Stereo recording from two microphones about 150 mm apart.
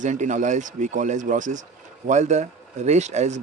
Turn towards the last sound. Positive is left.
turn(degrees=-50)  # may be behind; listen again after turning